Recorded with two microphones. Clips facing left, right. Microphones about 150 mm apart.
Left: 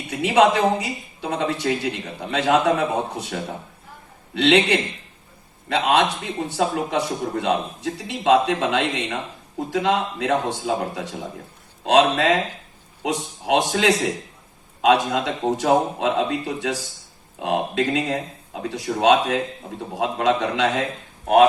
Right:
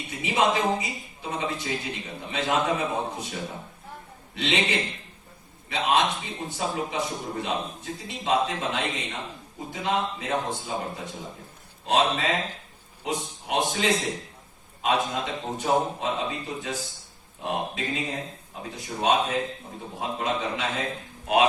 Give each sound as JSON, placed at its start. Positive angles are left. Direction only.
{"t": 0.1, "sound": "a man's voice", "side_deg": 70}